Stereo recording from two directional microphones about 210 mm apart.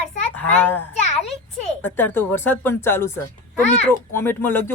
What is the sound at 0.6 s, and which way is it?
Speech, 10° left (ahead or behind).